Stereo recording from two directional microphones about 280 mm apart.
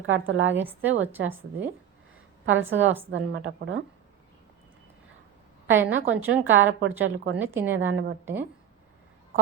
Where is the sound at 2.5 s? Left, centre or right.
Right.